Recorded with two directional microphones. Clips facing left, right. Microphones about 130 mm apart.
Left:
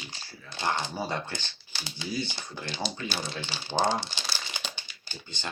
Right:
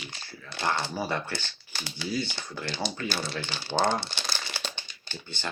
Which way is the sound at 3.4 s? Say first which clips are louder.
Right 2 dB; 50° right (ahead or behind).